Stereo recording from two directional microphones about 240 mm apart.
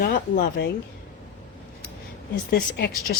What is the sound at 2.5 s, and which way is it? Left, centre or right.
Speech, left.